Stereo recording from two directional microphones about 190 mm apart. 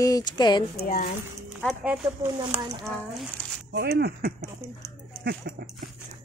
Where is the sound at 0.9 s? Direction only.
45° left (ahead or behind).